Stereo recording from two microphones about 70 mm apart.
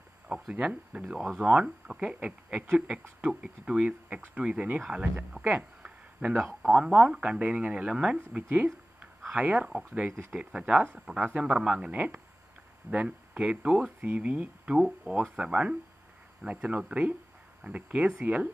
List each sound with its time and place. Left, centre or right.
0.3 s speech: centre
1.4 s speech: centre
5.6 s a sound: centre
6.4 s speech: centre
8.5 s a sound: right
9.4 s speech: centre
9.7 s speech: centre
11.4 s speech: centre